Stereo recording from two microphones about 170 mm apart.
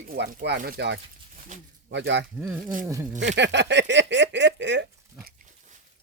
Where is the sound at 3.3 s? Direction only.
90° right.